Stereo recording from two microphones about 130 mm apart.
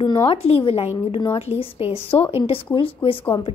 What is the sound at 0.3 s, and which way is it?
A woman's voice, 45° left (ahead or behind).